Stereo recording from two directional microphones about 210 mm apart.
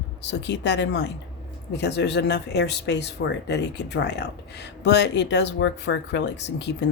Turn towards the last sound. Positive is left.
turn(degrees=55)  # may be behind; listen again after turning